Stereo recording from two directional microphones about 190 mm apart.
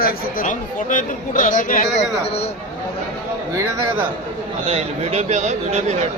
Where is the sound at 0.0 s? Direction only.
45° left (ahead or behind).